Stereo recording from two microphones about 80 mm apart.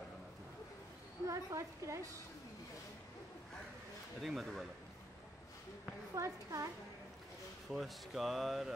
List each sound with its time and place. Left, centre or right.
1.2 s a woman's voice: right
4.2 s speech: centre
6.1 s a woman's voice: right
7.7 s speech: centre